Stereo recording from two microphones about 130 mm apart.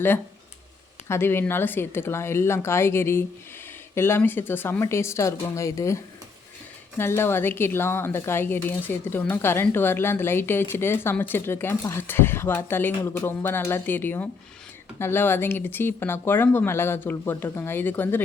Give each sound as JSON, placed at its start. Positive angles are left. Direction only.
{"t": 1.0, "sound": "a woman's voice", "side_deg": 20}